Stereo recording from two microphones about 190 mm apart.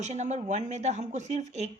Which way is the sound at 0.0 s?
35° right (ahead or behind).